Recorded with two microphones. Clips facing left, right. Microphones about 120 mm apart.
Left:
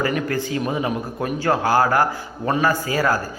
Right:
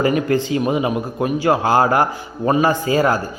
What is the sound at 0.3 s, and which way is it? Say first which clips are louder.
Speech: right 5 dB; 20° right (ahead or behind).